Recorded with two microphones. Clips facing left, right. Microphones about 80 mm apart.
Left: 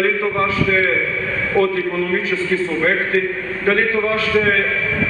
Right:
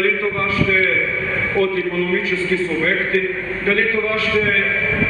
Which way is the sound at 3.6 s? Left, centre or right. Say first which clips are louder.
Left 2 dB; left.